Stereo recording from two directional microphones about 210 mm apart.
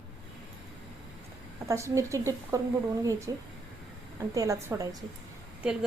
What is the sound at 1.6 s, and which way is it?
Speech, 15° right (ahead or behind).